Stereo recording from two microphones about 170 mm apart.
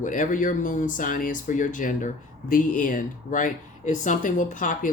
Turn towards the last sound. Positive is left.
turn(degrees=50)  # may be behind; listen again after turning